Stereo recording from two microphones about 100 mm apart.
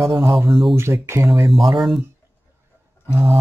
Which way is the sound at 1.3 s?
Centre (ahead or behind).